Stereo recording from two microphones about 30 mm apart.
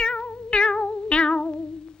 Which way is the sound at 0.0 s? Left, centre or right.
Left.